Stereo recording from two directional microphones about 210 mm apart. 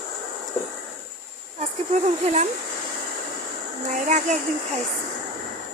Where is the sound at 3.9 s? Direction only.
35° right (ahead or behind).